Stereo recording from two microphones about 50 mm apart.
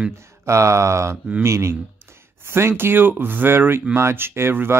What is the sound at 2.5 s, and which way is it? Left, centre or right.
Speech, right.